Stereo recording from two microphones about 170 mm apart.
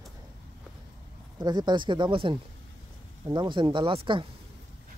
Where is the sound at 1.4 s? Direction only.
25° right (ahead or behind).